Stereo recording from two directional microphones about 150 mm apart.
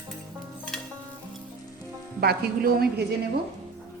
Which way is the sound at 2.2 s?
90° right.